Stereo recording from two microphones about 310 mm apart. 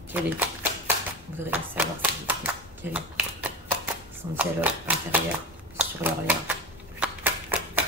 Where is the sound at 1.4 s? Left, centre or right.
Centre.